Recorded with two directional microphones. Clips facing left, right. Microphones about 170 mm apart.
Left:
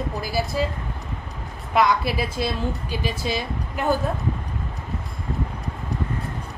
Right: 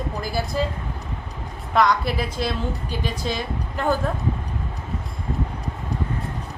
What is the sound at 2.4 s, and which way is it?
Speech, 15° left (ahead or behind).